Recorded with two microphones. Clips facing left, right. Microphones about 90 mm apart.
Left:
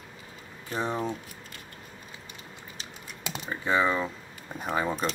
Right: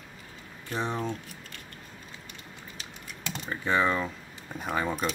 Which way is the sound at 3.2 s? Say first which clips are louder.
Even; 10° left (ahead or behind).